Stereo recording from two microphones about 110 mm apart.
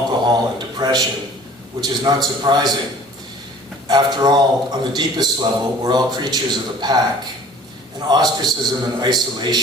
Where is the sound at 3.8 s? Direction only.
40° right (ahead or behind).